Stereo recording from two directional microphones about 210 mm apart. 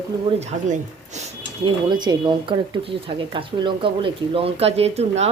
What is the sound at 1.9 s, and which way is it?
Speech, 20° right (ahead or behind).